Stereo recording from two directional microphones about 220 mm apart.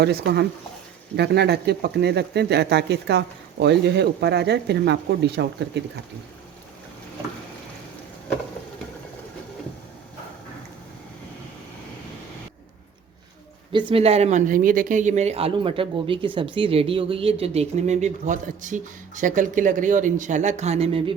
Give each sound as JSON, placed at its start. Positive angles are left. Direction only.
{"t": 0.0, "sound": "speech", "side_deg": -45}
{"t": 13.7, "sound": "speech", "side_deg": -25}